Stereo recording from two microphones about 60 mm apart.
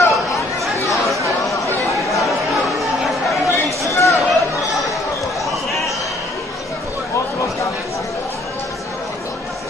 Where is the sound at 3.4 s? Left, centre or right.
Left.